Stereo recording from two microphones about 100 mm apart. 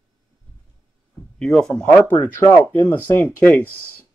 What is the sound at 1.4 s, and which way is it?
Speech, 5° left (ahead or behind).